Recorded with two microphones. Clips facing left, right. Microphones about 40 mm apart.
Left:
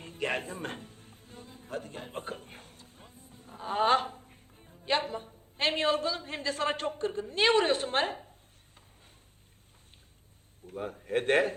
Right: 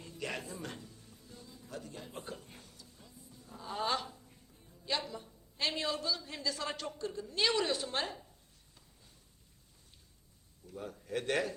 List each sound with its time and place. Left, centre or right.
0.0 s a man's voice: left
10.7 s speech: left